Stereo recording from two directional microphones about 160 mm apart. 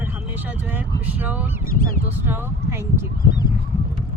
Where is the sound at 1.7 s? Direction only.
65° left (ahead or behind).